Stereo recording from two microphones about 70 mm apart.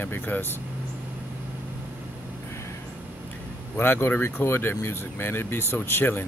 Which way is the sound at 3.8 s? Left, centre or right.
Left.